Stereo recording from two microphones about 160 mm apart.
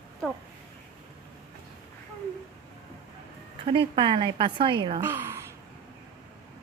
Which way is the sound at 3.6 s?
35° right (ahead or behind).